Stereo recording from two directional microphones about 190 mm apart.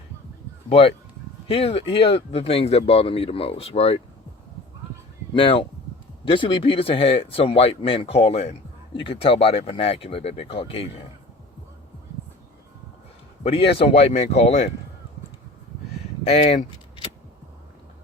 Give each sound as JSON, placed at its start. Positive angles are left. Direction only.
{"t": 0.7, "sound": "speech", "side_deg": 30}
{"t": 5.3, "sound": "speech", "side_deg": 30}
{"t": 13.4, "sound": "speech", "side_deg": 30}
{"t": 16.3, "sound": "speech", "side_deg": 35}